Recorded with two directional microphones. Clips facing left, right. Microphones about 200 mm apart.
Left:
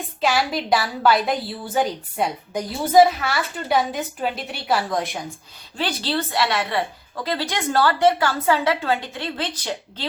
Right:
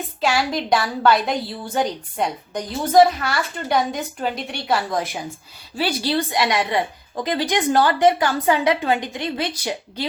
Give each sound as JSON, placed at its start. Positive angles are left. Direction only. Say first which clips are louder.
{"t": 0.2, "sound": "a woman's voice", "louder": "even", "side_deg": 0}